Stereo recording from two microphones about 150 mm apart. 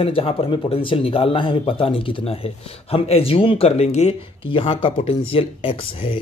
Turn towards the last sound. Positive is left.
turn(degrees=35)  # may be behind; listen again after turning